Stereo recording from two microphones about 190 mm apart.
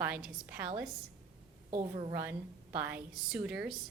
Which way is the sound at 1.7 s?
30° right (ahead or behind).